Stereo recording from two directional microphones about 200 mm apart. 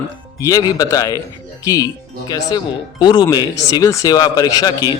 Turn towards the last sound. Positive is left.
turn(degrees=20)  # may be behind; listen again after turning